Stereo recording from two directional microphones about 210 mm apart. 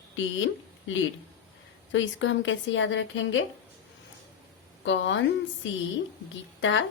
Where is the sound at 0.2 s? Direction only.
65° left (ahead or behind).